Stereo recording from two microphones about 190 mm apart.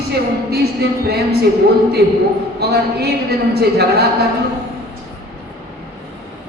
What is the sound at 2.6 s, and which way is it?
A woman's voice, 60° right (ahead or behind).